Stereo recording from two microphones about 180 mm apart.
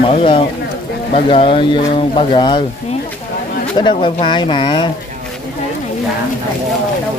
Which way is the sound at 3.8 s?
30° left (ahead or behind).